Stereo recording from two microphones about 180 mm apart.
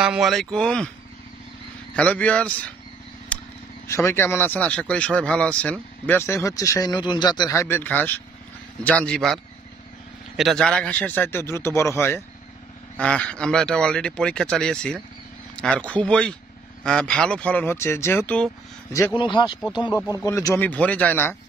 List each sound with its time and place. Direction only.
0.0 s speech: 5° right (ahead or behind)
2.0 s speech: 10° left (ahead or behind)
3.3 s a sound: 5° left (ahead or behind)
3.8 s speech: 15° left (ahead or behind)
19.1 s speech: 25° left (ahead or behind)
20.0 s speech: 15° left (ahead or behind)